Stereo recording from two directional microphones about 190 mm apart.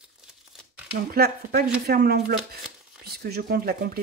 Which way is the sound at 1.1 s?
55° right (ahead or behind).